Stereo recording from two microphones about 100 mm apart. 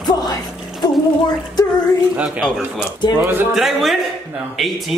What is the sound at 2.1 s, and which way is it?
Speech, 15° right (ahead or behind).